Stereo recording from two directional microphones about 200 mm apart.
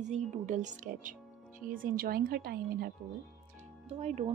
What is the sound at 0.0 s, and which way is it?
Speech, 35° right (ahead or behind).